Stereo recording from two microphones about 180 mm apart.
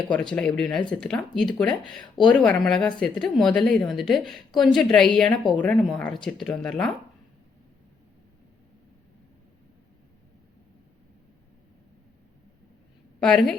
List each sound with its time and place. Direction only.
0.0 s a woman's voice: 5° left (ahead or behind)
13.1 s a woman's voice: 5° left (ahead or behind)